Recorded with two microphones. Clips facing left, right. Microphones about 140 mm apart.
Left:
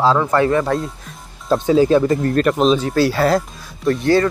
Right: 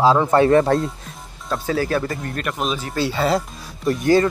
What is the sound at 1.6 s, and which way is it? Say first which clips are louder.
Speech: left 8 dB; 20° left (ahead or behind).